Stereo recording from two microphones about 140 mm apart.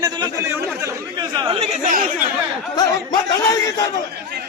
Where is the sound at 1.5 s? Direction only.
45° right (ahead or behind); by 2.0 s 65° right (ahead or behind).